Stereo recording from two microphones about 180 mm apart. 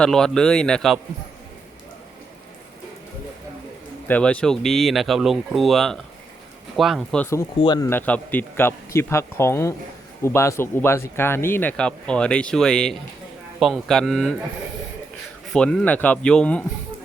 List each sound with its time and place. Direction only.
0.0 s speech: 5° left (ahead or behind)
4.1 s speech: 5° left (ahead or behind)
7.6 s speech: 25° left (ahead or behind)
7.9 s speech: 10° left (ahead or behind)
15.5 s speech: 5° left (ahead or behind)